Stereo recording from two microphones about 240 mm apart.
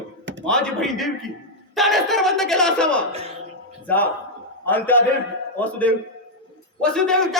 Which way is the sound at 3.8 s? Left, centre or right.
Centre.